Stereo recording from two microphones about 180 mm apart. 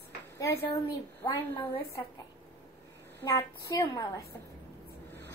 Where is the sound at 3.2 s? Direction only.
20° left (ahead or behind).